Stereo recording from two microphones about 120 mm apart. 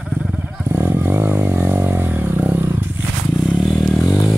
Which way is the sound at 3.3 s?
Centre (ahead or behind).